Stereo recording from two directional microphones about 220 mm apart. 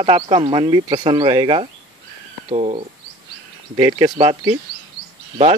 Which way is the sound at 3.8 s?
15° right (ahead or behind).